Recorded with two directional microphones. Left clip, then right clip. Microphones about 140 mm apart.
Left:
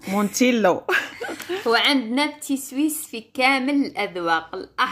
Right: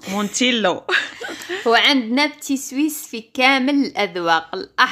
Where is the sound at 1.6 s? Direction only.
55° right (ahead or behind).